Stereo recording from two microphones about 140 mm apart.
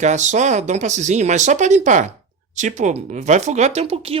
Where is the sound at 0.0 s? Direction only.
60° right (ahead or behind).